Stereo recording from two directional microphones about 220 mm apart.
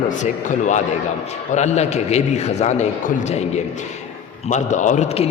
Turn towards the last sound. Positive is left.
turn(degrees=30)  # may be behind; listen again after turning